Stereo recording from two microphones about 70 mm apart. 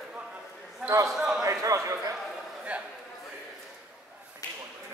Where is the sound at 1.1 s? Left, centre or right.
Centre.